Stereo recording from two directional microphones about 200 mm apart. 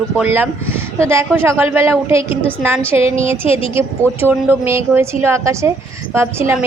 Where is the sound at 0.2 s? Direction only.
10° right (ahead or behind).